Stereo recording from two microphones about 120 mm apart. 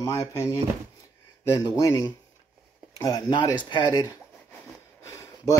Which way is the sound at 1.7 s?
25° left (ahead or behind).